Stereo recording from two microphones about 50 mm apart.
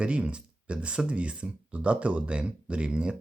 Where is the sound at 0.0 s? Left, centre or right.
Right.